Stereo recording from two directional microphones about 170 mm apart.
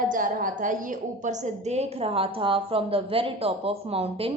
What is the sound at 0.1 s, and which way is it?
A woman's voice, 50° right (ahead or behind).